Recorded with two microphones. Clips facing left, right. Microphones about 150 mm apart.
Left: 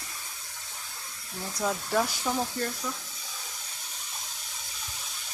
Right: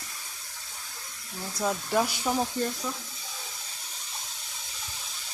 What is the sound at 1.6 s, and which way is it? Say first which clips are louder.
Speech: right 1 dB; 10° right (ahead or behind).